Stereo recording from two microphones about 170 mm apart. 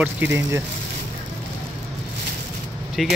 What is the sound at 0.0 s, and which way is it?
Speech, 10° right (ahead or behind).